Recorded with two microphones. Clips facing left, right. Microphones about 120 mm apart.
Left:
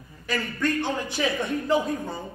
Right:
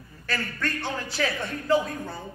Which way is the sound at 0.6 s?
15° left (ahead or behind).